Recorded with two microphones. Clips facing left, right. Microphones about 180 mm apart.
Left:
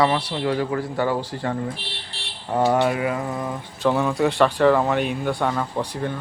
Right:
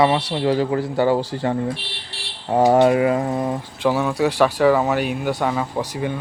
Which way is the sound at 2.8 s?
35° right (ahead or behind).